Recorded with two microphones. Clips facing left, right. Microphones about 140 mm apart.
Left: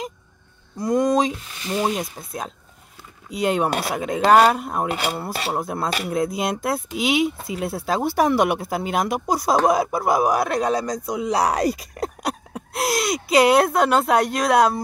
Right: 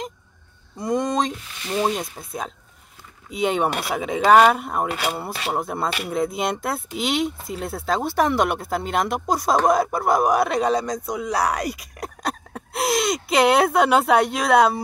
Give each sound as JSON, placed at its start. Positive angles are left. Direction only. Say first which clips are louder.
{"t": 0.7, "sound": "speech", "louder": "left 3 dB", "side_deg": 0}
{"t": 11.3, "sound": "speech", "louder": "left 3 dB", "side_deg": 30}
{"t": 12.2, "sound": "speech", "louder": "left 1 dB", "side_deg": 5}